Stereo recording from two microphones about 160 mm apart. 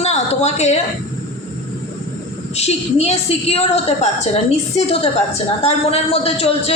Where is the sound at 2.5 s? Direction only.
40° left (ahead or behind).